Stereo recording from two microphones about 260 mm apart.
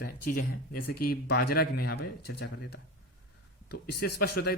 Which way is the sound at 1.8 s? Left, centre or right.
Left.